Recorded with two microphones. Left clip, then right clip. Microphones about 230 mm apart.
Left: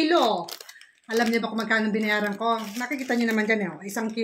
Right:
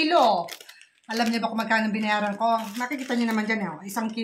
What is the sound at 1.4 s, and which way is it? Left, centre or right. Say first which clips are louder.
Speech: right 1 dB; centre.